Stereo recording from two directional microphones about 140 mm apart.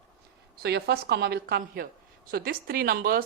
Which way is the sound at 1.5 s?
90° right.